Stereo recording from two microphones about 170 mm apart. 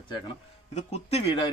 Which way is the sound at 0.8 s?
40° left (ahead or behind).